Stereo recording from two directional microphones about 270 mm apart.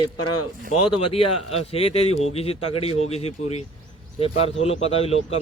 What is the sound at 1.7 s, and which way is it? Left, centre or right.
Speech, left.